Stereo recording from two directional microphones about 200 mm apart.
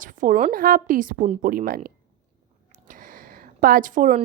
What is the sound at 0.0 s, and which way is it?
A woman's voice, 40° right (ahead or behind).